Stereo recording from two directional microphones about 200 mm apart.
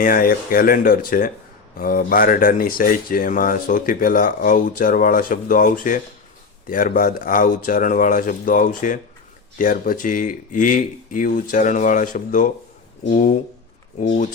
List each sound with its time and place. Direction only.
0.0 s speech: 45° left (ahead or behind)